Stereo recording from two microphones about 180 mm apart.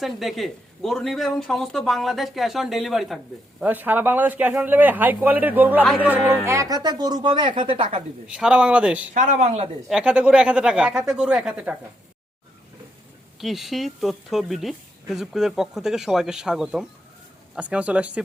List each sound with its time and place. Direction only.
0.0 s speech: centre (ahead or behind); by 8.0 s 30° right (ahead or behind)
8.3 s speech: 5° right (ahead or behind)
9.1 s speech: 40° right (ahead or behind)
9.9 s speech: 5° right (ahead or behind)
13.4 s speech: centre (ahead or behind)